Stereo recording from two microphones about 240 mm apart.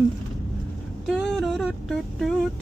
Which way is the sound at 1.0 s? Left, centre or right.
Centre.